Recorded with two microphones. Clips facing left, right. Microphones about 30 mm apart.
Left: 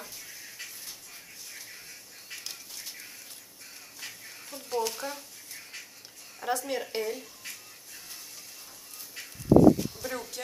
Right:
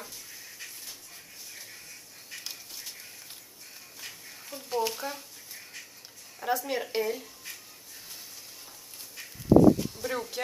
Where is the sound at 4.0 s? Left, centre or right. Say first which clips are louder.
Left 1 dB; centre.